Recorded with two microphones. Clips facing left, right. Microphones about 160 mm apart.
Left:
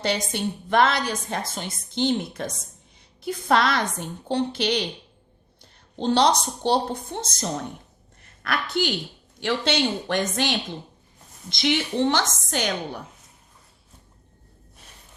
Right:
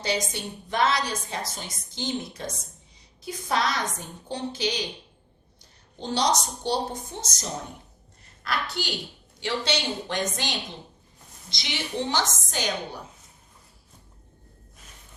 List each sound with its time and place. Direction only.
0.0 s a woman's voice: 60° left (ahead or behind)
6.0 s a woman's voice: 60° left (ahead or behind)